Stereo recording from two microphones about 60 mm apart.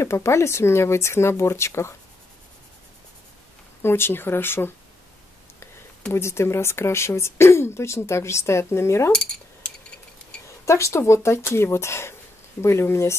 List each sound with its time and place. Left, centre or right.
0.0 s speech: left
3.8 s speech: left
6.1 s speech: left
10.6 s speech: left